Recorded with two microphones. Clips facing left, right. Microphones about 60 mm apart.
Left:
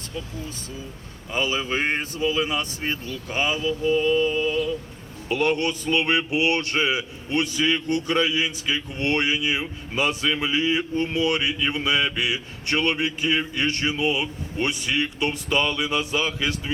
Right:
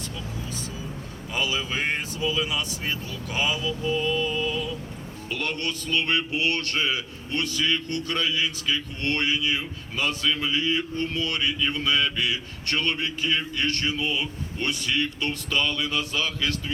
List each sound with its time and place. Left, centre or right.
1.3 s speech: left
5.3 s speech: centre